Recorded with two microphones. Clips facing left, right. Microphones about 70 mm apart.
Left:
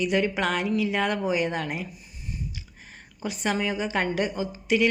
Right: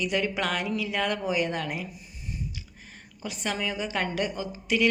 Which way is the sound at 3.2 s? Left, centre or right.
Centre.